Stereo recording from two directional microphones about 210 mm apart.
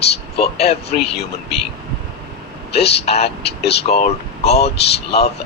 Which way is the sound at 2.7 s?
30° left (ahead or behind).